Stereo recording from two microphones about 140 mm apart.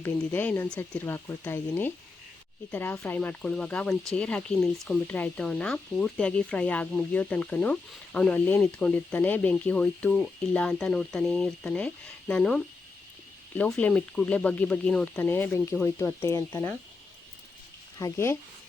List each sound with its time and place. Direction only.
0.0 s speech: 15° left (ahead or behind)
18.0 s speech: 20° left (ahead or behind)